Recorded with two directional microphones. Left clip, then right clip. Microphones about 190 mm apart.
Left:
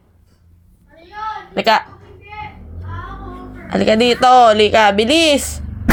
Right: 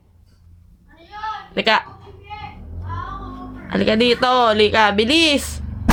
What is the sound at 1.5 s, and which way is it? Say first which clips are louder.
Speech: left 3 dB; centre (ahead or behind).